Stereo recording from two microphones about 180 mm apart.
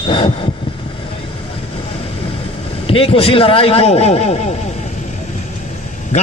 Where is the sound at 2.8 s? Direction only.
30° left (ahead or behind).